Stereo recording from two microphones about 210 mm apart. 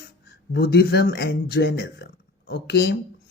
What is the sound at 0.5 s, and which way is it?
Speech, 50° left (ahead or behind).